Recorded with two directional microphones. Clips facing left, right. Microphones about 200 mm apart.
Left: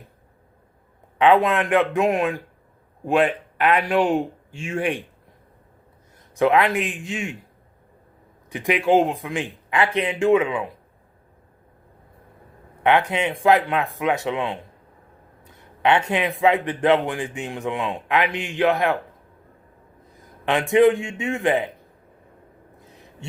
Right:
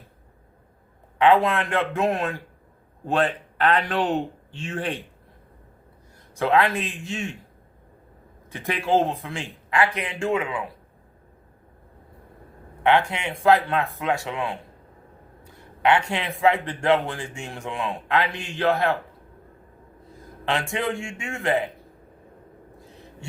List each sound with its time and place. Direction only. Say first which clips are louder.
1.2 s a man's voice: left 2 dB; 20° left (ahead or behind)
6.3 s a man's voice: left 3 dB; 20° left (ahead or behind)
8.4 s a man's voice: left 5 dB; 15° left (ahead or behind)
12.8 s a man's voice: left 2 dB; 20° left (ahead or behind)
15.8 s a man's voice: left 2 dB; 20° left (ahead or behind)
20.4 s a man's voice: left 10 dB; 20° left (ahead or behind)